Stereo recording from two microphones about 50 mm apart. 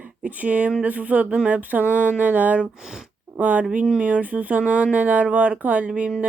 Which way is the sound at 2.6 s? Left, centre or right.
Centre.